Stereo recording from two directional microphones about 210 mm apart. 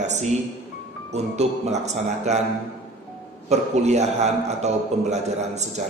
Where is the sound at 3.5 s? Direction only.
30° right (ahead or behind).